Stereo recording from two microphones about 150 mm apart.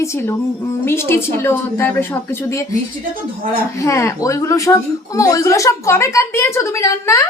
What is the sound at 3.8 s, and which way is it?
A woman's voice, 20° left (ahead or behind).